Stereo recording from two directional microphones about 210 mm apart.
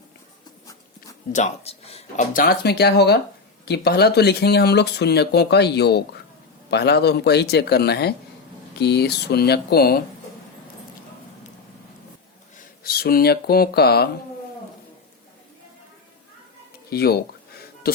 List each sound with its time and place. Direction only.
1.3 s speech: 35° left (ahead or behind); by 10.0 s 50° left (ahead or behind)
12.8 s speech: 45° left (ahead or behind)
16.9 s speech: 50° left (ahead or behind)